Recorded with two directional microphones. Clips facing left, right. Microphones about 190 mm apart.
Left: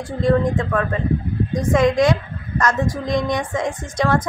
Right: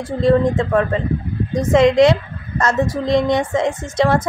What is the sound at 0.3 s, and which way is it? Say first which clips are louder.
A woman's voice: right 3 dB; 25° right (ahead or behind).